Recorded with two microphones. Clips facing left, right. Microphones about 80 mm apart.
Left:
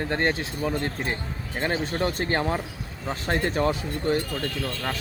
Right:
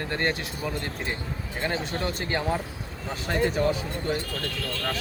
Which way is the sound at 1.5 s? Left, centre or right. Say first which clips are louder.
Left 3 dB; left.